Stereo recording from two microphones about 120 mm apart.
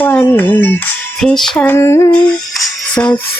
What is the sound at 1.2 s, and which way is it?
Music, 5° left (ahead or behind).